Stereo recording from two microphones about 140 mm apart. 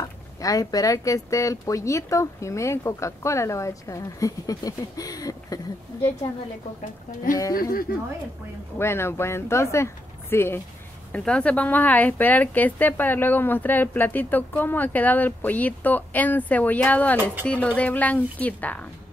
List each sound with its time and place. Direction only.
0.4 s speech: 25° left (ahead or behind)
8.7 s a woman's voice: 15° left (ahead or behind)